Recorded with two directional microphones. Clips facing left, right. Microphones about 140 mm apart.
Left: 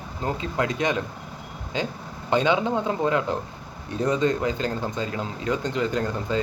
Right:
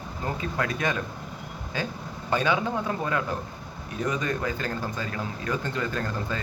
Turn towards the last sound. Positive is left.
turn(degrees=20)  # may be behind; listen again after turning